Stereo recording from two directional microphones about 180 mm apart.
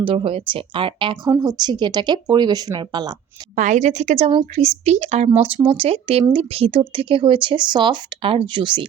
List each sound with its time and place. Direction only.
0.0 s speech: 30° right (ahead or behind)
3.5 s a woman's voice: 45° right (ahead or behind); by 8.9 s 25° right (ahead or behind)